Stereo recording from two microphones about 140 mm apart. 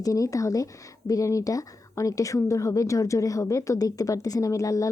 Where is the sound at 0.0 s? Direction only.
25° left (ahead or behind).